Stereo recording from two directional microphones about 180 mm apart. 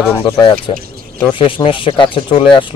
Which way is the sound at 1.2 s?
30° left (ahead or behind).